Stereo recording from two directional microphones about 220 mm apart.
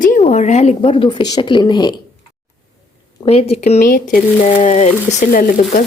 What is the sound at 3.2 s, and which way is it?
Speech, 25° left (ahead or behind).